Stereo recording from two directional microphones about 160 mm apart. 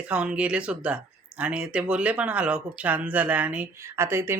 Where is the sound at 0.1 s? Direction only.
5° right (ahead or behind).